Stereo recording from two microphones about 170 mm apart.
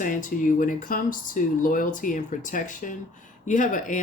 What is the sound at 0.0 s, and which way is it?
Speech, 50° left (ahead or behind).